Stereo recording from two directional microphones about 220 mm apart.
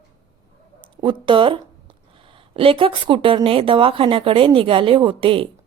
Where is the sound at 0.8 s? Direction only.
20° right (ahead or behind).